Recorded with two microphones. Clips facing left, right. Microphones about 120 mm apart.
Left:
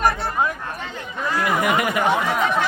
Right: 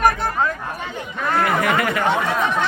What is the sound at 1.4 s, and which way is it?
Speech, 15° left (ahead or behind).